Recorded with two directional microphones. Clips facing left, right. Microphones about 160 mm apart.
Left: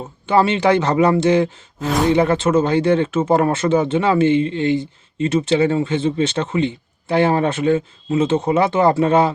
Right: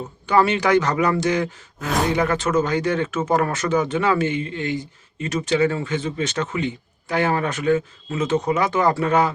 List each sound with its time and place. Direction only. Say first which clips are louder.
0.3 s speech: left 3 dB; 25° left (ahead or behind)